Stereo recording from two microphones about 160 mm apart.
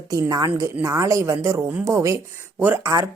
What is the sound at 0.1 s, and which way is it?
A woman's voice, 20° right (ahead or behind).